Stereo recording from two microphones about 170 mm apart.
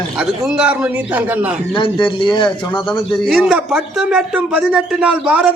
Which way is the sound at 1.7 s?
30° left (ahead or behind).